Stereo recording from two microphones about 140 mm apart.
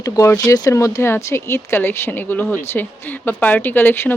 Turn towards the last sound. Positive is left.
turn(degrees=15)  # may be behind; listen again after turning